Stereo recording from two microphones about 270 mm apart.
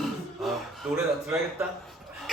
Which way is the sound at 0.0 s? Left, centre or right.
Centre.